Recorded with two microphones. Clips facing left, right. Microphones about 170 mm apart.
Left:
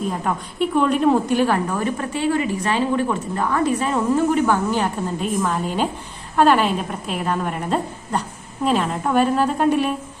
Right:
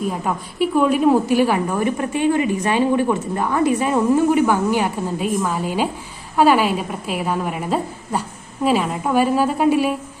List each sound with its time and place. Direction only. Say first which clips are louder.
0.1 s a woman's voice: even; 5° right (ahead or behind)